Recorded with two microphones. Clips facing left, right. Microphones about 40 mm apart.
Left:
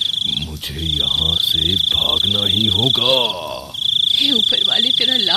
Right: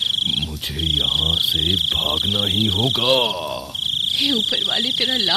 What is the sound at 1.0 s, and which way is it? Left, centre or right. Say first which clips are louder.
Speech: left 3 dB; left.